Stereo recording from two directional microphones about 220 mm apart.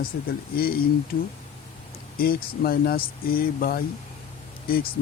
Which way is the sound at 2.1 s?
40° left (ahead or behind).